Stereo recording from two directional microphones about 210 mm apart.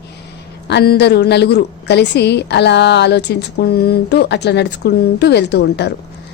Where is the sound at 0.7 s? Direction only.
50° left (ahead or behind).